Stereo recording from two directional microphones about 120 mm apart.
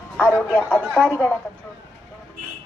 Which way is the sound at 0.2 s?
15° left (ahead or behind).